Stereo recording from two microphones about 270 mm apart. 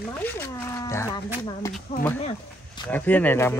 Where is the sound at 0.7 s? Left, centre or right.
Centre.